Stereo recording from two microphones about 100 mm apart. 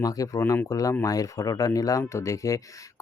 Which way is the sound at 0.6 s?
35° left (ahead or behind).